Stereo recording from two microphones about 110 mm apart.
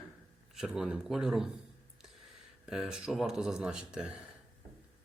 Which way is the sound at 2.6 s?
5° right (ahead or behind).